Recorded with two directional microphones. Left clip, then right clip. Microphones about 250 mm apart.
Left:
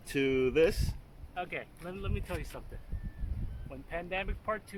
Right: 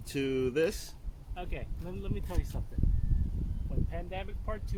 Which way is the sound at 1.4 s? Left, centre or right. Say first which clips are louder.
Left 5 dB; centre.